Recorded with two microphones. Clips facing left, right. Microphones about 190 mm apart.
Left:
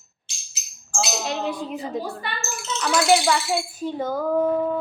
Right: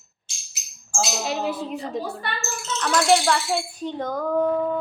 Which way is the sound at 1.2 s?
5° right (ahead or behind).